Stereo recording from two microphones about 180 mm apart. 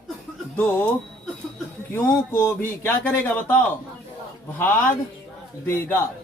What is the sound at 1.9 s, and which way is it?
A man's voice, 10° left (ahead or behind).